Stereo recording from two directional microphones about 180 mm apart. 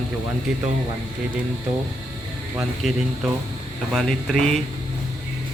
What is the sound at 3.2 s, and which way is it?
Speech, centre (ahead or behind).